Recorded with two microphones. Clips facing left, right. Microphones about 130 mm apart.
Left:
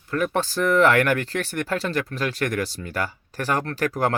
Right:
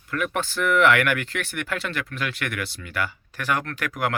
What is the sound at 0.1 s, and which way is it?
Speech, 35° left (ahead or behind).